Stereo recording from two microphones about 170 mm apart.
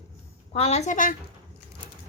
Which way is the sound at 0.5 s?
35° left (ahead or behind).